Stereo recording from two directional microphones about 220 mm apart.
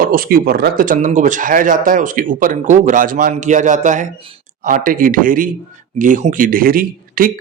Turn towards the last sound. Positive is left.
turn(degrees=-40)  # may be behind; listen again after turning